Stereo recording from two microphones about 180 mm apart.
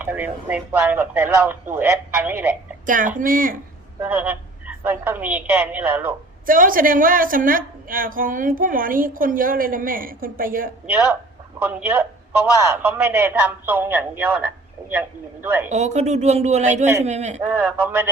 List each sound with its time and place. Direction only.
0.0 s speech: 10° right (ahead or behind)
2.8 s a woman's voice: 45° right (ahead or behind)
4.0 s speech: 10° right (ahead or behind)
6.4 s a woman's voice: 50° right (ahead or behind)
10.8 s speech: 10° right (ahead or behind)
15.7 s speech: 40° right (ahead or behind)
17.6 s speech: 10° right (ahead or behind)